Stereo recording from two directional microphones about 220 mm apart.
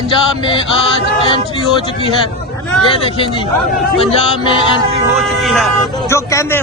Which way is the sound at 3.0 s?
25° left (ahead or behind).